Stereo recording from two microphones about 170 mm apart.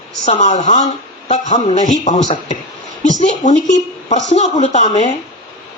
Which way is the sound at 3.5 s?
45° left (ahead or behind).